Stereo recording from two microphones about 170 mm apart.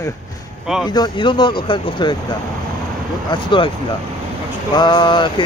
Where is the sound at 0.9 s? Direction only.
25° left (ahead or behind).